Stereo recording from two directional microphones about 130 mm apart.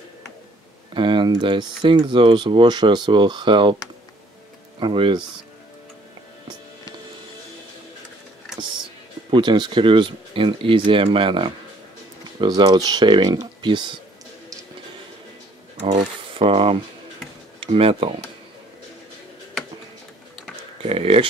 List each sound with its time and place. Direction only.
0.9 s speech: 35° right (ahead or behind)
4.7 s speech: 40° right (ahead or behind)
9.3 s speech: 35° right (ahead or behind)
16.3 s speech: 45° right (ahead or behind)
20.8 s speech: 50° right (ahead or behind)